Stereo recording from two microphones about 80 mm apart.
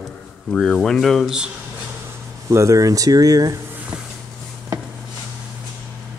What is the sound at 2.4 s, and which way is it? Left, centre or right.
Speech, right.